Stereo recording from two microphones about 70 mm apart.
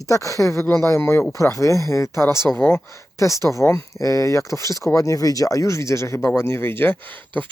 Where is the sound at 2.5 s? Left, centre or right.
Left.